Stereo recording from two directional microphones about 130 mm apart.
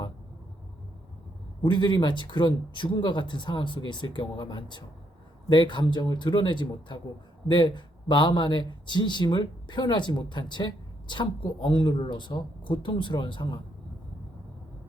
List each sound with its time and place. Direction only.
1.6 s a woman's voice: 35° left (ahead or behind)